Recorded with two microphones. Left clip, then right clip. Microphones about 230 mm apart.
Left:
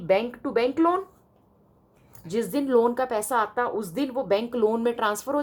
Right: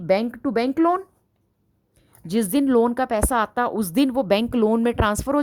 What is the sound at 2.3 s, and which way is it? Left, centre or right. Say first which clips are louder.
A woman's voice: right 4 dB; right.